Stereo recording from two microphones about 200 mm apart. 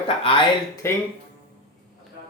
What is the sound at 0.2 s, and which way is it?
Speech, 25° left (ahead or behind).